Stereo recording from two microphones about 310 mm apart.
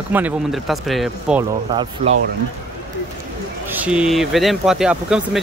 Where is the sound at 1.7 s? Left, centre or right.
Centre.